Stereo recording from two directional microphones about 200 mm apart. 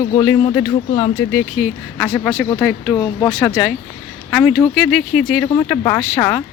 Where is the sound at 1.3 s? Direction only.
Centre (ahead or behind).